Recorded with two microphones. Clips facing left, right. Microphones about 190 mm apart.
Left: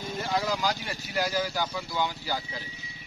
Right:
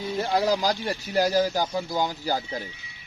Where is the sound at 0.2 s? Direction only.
40° right (ahead or behind).